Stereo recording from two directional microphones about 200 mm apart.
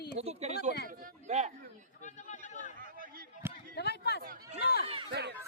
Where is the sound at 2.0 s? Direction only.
40° left (ahead or behind).